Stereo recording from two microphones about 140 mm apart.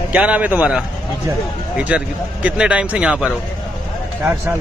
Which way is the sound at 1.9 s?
10° right (ahead or behind).